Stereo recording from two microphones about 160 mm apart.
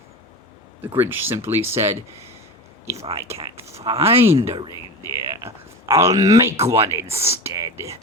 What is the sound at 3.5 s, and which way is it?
Speech, 20° right (ahead or behind).